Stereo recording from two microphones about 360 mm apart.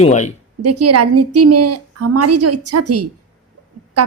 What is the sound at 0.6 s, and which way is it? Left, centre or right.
Speech, right.